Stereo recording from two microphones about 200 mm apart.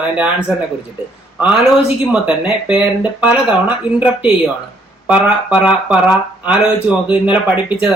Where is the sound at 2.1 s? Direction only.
5° right (ahead or behind).